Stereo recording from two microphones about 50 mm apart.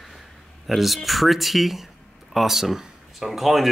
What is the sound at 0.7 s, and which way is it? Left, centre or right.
Speech, centre.